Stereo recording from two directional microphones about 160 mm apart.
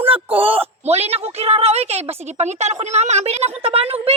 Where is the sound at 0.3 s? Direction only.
35° right (ahead or behind).